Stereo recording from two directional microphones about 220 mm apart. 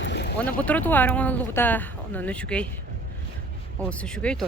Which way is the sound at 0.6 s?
5° left (ahead or behind).